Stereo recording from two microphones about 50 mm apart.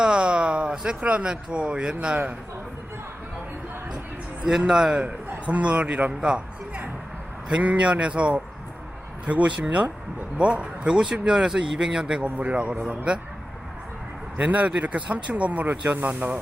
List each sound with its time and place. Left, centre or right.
0.0 s a sound: centre
1.0 s speech: right
4.4 s a man's voice: centre
5.0 s speech: right
7.6 s a man's voice: right
14.3 s speech: right